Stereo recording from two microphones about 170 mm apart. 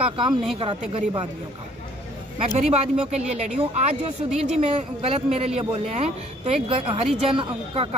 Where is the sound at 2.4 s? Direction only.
40° right (ahead or behind).